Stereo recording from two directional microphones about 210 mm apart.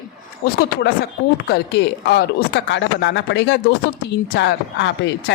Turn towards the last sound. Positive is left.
turn(degrees=60)  # may be behind; listen again after turning